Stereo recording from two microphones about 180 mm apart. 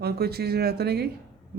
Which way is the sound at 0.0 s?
60° right (ahead or behind).